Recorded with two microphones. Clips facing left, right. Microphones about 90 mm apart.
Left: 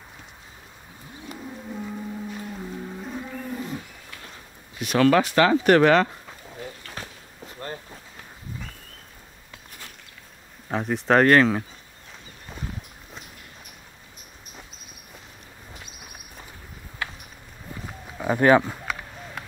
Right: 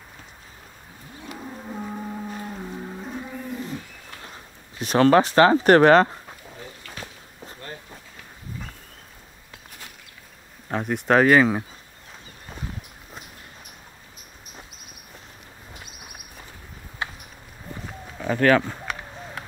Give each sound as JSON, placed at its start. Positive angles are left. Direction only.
{"t": 1.4, "sound": "a sound", "side_deg": -25}
{"t": 3.0, "sound": "livestock", "side_deg": -5}
{"t": 4.7, "sound": "speech", "side_deg": -35}
{"t": 10.7, "sound": "speech", "side_deg": 0}
{"t": 17.0, "sound": "horse", "side_deg": -25}
{"t": 18.1, "sound": "a sound", "side_deg": 15}